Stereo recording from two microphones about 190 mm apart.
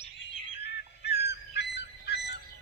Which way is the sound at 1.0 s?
60° left (ahead or behind).